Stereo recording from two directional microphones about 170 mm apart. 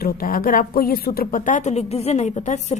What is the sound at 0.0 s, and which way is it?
A woman's voice, 55° left (ahead or behind).